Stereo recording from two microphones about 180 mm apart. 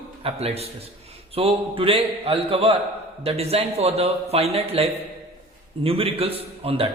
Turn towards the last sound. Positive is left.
turn(degrees=-35)  # may be behind; listen again after turning